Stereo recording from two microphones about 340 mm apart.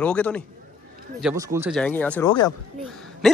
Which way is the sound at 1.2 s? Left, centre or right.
Centre.